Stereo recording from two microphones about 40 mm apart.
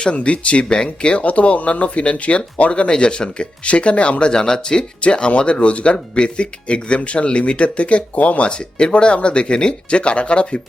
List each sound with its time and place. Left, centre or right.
0.0 s speech: left
1.3 s speech: left; by 4.9 s centre
4.9 s speech: left
8.4 s speech: left